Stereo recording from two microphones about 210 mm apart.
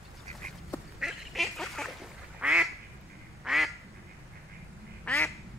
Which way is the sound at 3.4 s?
Centre (ahead or behind).